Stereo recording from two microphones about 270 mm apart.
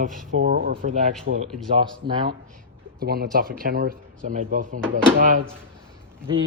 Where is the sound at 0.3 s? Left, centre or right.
Right.